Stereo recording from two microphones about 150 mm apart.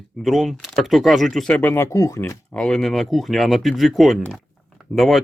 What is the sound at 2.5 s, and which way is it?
Speech, 5° left (ahead or behind).